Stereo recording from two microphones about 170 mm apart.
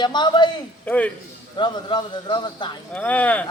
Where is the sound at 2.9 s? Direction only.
10° left (ahead or behind).